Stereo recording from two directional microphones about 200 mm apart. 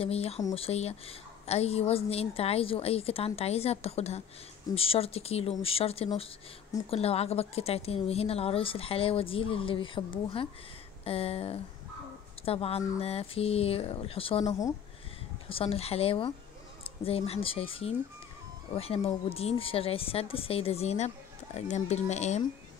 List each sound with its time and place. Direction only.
0.0 s a woman's voice: 30° left (ahead or behind)
11.1 s a woman's voice: 30° left (ahead or behind)
15.4 s a woman's voice: 30° left (ahead or behind)